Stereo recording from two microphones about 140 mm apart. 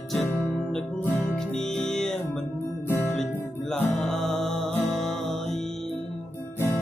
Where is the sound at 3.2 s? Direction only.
5° left (ahead or behind).